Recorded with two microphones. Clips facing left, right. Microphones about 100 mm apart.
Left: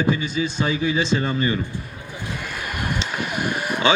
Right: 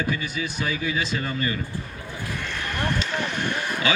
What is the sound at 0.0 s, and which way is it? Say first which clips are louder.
Speech: left 6 dB; 25° left (ahead or behind).